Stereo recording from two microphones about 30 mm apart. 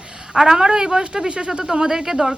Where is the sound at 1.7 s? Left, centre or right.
Centre.